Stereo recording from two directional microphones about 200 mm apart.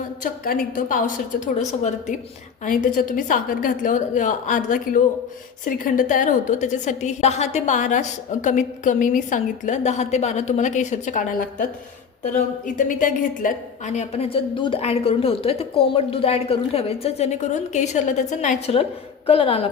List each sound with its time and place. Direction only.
0.2 s a woman's voice: 45° left (ahead or behind); by 19.6 s 30° left (ahead or behind)